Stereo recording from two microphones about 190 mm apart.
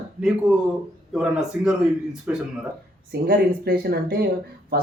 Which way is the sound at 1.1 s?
5° right (ahead or behind).